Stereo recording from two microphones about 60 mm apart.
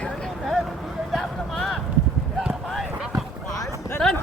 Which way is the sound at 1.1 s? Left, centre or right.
Centre.